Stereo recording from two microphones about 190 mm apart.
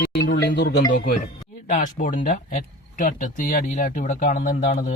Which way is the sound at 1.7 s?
45° left (ahead or behind).